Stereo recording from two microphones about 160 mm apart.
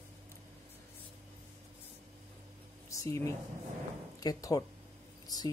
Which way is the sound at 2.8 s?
20° left (ahead or behind).